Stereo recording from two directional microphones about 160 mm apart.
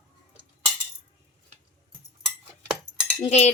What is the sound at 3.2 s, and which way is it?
Speech, 40° left (ahead or behind).